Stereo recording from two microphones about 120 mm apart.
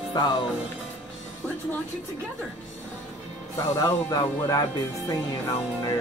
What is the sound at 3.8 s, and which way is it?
Speech, 30° left (ahead or behind).